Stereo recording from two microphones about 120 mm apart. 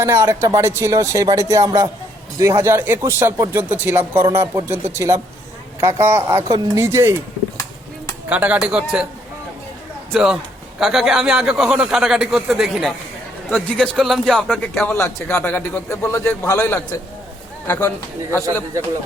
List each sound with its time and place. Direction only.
0.0 s speech: 25° right (ahead or behind)
8.3 s speech: 10° right (ahead or behind)
10.1 s a man's voice: 5° right (ahead or behind)
14.8 s a man's voice: 25° left (ahead or behind)
17.7 s a man's voice: 15° left (ahead or behind)